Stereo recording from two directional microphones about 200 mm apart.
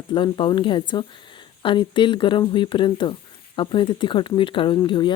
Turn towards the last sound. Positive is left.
turn(degrees=20)  # may be behind; listen again after turning